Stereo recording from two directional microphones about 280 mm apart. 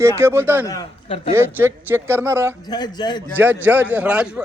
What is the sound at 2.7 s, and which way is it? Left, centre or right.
Speech, centre.